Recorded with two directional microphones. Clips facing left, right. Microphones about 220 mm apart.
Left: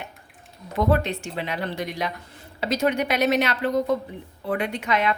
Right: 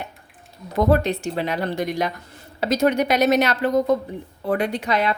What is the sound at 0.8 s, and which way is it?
A woman's voice, 40° right (ahead or behind).